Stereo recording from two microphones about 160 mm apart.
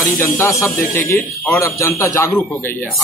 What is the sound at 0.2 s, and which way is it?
A man's voice, 20° left (ahead or behind).